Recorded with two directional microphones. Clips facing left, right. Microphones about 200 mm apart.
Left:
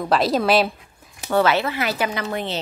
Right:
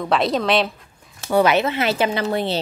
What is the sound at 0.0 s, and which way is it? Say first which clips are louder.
Speech: even; centre (ahead or behind).